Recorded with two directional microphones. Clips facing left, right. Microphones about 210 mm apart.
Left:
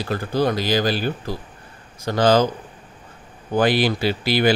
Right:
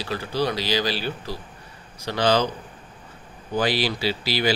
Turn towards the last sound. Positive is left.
turn(degrees=55)  # may be behind; listen again after turning